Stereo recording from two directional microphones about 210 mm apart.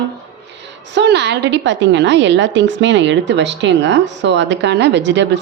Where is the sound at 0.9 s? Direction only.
55° right (ahead or behind).